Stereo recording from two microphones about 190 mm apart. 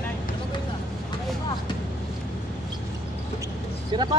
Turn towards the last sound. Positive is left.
turn(degrees=-25)  # may be behind; listen again after turning